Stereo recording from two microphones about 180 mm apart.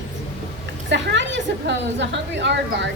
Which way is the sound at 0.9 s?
80° right.